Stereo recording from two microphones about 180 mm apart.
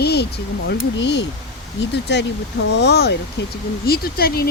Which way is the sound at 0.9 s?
75° left (ahead or behind).